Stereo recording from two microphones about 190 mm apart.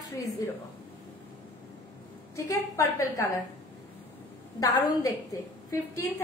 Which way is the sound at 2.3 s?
15° left (ahead or behind).